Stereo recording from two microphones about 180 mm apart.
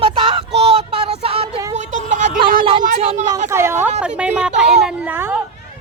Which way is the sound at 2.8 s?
40° right (ahead or behind).